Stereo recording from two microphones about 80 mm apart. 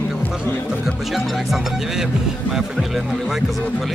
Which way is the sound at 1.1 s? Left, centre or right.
Centre.